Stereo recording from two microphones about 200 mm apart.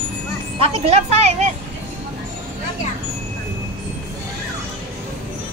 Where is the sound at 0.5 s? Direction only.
30° right (ahead or behind).